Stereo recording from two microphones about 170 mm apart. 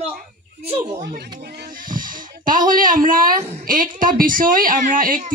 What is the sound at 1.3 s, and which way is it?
A woman's voice, 65° right (ahead or behind).